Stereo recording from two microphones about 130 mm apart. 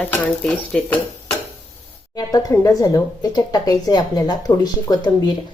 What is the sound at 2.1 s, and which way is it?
A woman's voice, 30° left (ahead or behind).